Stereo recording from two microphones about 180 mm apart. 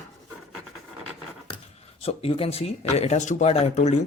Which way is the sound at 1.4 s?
35° left (ahead or behind).